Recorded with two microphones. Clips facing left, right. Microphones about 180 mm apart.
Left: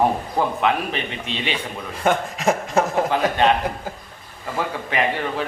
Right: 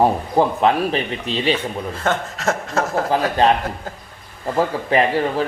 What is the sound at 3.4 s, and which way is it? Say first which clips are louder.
A man's voice: right 2 dB; 35° right (ahead or behind).